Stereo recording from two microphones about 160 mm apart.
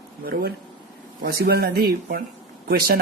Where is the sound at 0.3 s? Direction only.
70° right (ahead or behind).